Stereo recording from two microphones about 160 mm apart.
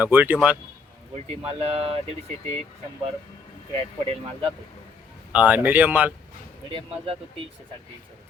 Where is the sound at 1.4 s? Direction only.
35° right (ahead or behind).